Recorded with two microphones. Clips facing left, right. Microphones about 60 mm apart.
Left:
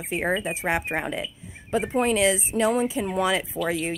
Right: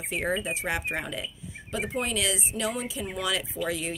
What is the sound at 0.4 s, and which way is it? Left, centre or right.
A woman's voice, left.